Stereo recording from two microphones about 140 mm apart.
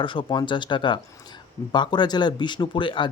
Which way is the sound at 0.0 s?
35° left (ahead or behind).